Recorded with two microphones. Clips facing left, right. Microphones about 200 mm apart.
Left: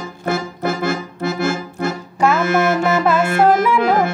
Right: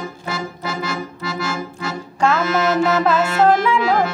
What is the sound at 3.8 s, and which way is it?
Music, 50° left (ahead or behind).